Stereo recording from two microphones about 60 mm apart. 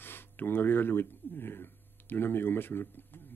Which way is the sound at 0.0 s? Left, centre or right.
Left.